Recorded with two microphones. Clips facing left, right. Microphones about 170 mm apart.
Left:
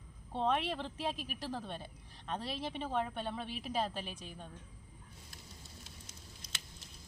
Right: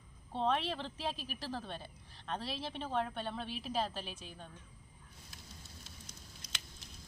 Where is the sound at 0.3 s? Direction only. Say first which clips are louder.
Left 1 dB; 10° left (ahead or behind).